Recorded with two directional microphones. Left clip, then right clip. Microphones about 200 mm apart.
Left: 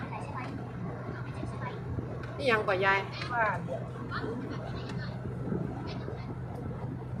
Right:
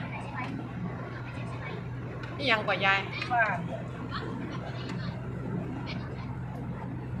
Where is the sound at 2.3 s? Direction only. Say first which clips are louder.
Even; 10° left (ahead or behind).